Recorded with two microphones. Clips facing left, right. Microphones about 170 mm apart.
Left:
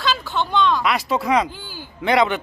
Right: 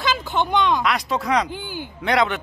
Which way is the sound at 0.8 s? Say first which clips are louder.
Left 2 dB; centre (ahead or behind).